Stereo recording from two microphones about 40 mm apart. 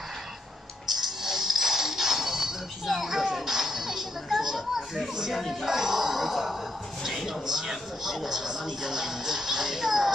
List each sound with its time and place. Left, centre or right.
1.0 s music: centre
5.4 s speech: centre
5.8 s a sound: centre
7.4 s speech: centre